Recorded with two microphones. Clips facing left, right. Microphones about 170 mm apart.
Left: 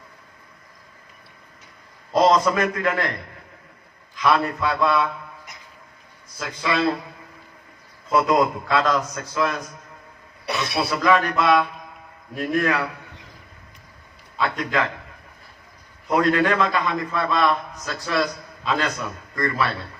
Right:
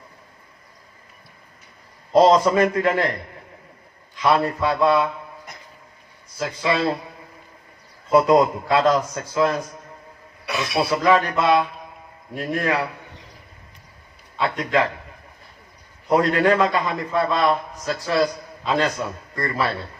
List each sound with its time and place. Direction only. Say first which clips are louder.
2.1 s a man's voice: right 3 dB; 30° right (ahead or behind)
4.2 s a man's voice: right 1 dB; 35° right (ahead or behind)
6.4 s a man's voice: right 2 dB; 30° right (ahead or behind)
8.1 s a man's voice: right 4 dB; 30° right (ahead or behind)
11.0 s a man's voice: even; 30° right (ahead or behind)
14.3 s a man's voice: right 2 dB; 35° right (ahead or behind)
16.0 s a man's voice: right 2 dB; 35° right (ahead or behind)